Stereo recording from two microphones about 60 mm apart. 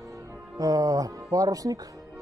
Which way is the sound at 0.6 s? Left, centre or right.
Right.